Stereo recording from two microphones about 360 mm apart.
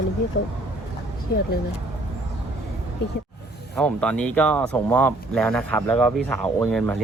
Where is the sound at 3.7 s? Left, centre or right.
Centre.